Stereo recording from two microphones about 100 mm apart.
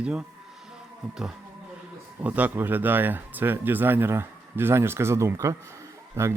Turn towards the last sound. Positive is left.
turn(degrees=-25)  # may be behind; listen again after turning